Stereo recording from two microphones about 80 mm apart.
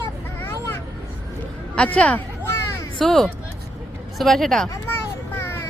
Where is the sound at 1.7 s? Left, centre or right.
Centre.